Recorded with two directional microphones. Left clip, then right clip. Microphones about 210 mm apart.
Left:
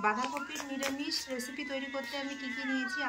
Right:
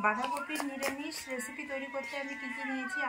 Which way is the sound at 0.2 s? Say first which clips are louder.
Right 2 dB; 45° right (ahead or behind).